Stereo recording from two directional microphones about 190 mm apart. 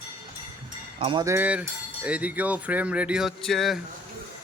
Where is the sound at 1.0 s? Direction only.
25° right (ahead or behind).